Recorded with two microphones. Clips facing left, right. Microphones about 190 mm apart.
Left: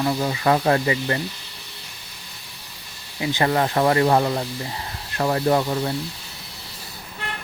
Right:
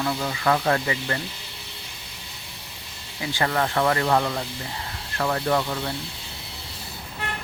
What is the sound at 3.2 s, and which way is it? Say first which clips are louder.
Speech: left 4 dB; 20° left (ahead or behind).